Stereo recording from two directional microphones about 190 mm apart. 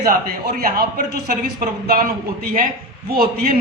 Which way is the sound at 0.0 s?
50° right (ahead or behind).